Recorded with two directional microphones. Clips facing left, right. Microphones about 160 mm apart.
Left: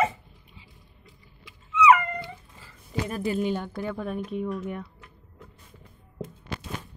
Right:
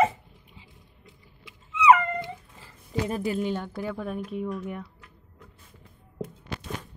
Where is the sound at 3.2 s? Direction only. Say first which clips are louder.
Left 1 dB; 5° left (ahead or behind).